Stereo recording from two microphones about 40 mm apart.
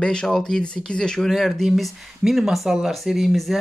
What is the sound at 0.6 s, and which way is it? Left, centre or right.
Speech, left.